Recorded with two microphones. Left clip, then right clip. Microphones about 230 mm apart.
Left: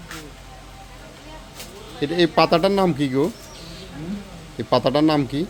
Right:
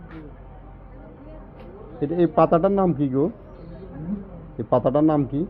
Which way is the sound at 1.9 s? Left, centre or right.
Left.